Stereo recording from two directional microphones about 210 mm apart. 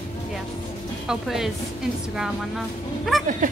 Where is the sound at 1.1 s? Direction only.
Centre (ahead or behind).